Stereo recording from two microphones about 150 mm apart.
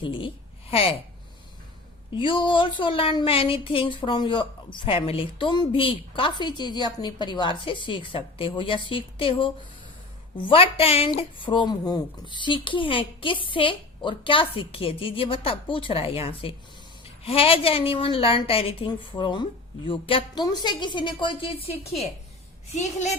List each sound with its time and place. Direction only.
0.0 s speech: 35° left (ahead or behind)
2.1 s speech: 35° left (ahead or behind)
10.5 s speech: 40° left (ahead or behind)
22.8 s a woman's voice: 50° left (ahead or behind)